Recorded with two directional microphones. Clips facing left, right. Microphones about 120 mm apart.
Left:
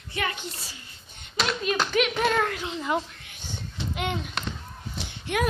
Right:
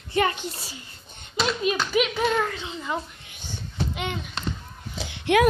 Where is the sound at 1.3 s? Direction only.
Centre (ahead or behind).